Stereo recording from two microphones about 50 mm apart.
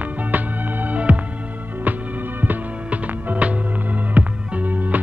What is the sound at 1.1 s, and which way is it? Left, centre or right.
Music, right.